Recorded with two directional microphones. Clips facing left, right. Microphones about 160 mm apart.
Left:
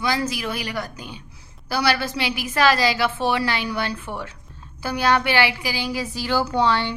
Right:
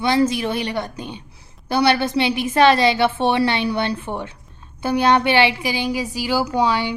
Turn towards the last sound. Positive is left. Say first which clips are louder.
# right 1 dB
turn(degrees=-10)  # may be behind; listen again after turning